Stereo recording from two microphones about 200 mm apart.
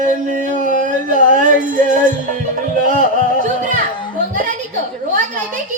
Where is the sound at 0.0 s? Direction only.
40° right (ahead or behind).